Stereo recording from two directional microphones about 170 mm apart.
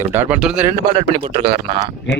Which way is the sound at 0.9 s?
45° right (ahead or behind).